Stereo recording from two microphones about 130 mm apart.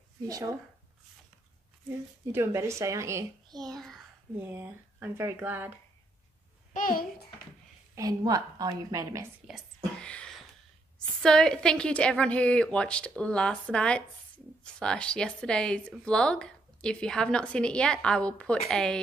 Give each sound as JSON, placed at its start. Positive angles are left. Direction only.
{"t": 0.3, "sound": "a child's voice", "side_deg": -25}
{"t": 1.9, "sound": "a child's voice", "side_deg": -20}
{"t": 3.7, "sound": "a child's voice", "side_deg": 0}
{"t": 4.4, "sound": "speech", "side_deg": -15}
{"t": 6.7, "sound": "a child's voice", "side_deg": 90}
{"t": 7.9, "sound": "a child's voice", "side_deg": -30}
{"t": 9.5, "sound": "speech", "side_deg": -5}
{"t": 9.9, "sound": "a sound", "side_deg": 5}
{"t": 11.1, "sound": "a woman's voice", "side_deg": 5}